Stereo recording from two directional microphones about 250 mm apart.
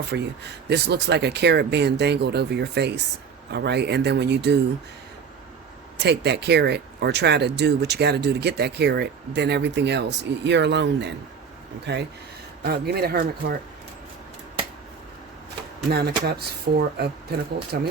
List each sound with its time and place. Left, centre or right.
0.1 s speech: right
6.0 s speech: right
15.9 s speech: right